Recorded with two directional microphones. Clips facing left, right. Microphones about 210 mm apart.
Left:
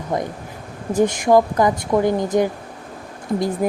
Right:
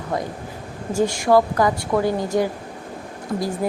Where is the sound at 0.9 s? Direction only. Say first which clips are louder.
Left 2 dB; 20° left (ahead or behind).